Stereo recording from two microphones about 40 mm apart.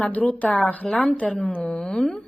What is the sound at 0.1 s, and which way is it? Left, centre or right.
A woman's voice, left.